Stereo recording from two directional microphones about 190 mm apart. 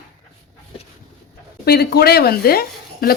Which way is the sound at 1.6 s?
55° left (ahead or behind).